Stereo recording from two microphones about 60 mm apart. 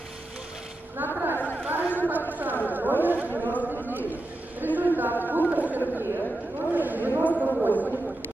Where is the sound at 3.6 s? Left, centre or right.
Right.